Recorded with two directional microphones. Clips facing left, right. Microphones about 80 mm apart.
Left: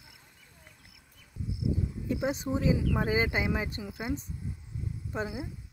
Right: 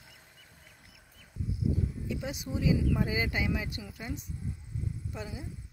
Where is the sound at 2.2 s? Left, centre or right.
Left.